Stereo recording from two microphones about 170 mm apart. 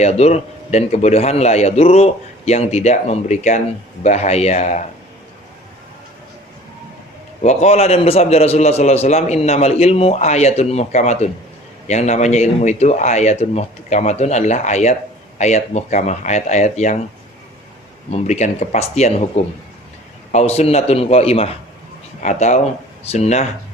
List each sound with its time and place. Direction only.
0.0 s a man's voice: 40° left (ahead or behind)
7.4 s a man's voice: 40° left (ahead or behind)
18.1 s a man's voice: 45° left (ahead or behind)
20.3 s a man's voice: 40° left (ahead or behind)